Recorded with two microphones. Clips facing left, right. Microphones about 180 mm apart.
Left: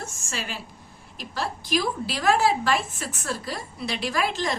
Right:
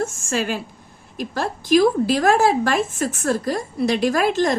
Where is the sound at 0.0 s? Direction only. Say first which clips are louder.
Right 12 dB; 50° right (ahead or behind).